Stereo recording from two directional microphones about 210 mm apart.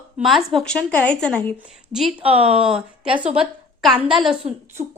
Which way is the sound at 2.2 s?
25° right (ahead or behind).